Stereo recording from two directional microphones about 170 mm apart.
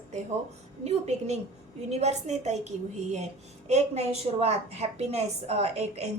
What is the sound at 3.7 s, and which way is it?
A woman's voice, 40° right (ahead or behind).